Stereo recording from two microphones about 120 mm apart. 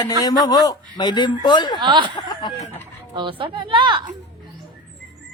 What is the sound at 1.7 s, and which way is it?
Speech, 40° right (ahead or behind).